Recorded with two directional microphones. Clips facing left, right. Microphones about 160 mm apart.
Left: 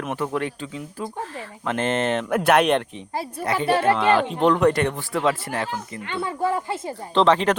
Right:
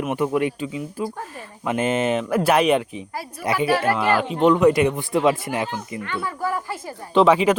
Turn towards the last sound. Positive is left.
turn(degrees=-5)  # may be behind; listen again after turning